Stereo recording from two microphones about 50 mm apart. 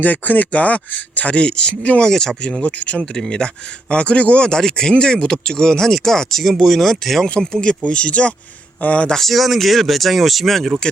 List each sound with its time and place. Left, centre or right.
0.0 s speech: left
2.0 s speech: centre
7.3 s speech: centre; by 9.0 s left
9.1 s speech: centre